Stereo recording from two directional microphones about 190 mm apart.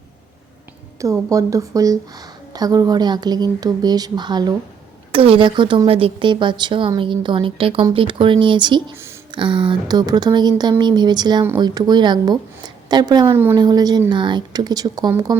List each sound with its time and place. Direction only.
0.9 s a woman's voice: 15° right (ahead or behind)